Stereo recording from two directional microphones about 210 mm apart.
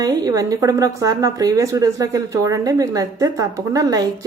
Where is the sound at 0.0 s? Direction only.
15° right (ahead or behind).